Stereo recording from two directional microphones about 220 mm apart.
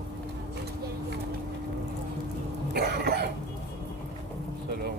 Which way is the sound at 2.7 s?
45° right (ahead or behind).